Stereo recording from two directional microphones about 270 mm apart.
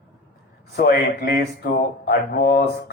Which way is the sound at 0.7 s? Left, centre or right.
Left.